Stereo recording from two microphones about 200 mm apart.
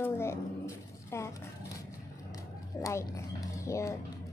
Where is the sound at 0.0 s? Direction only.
15° left (ahead or behind).